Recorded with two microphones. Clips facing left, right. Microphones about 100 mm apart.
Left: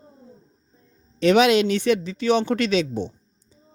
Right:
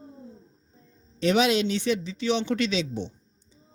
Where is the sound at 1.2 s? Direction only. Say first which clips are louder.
Left 6 dB; 65° left (ahead or behind); by 3.1 s 50° left (ahead or behind).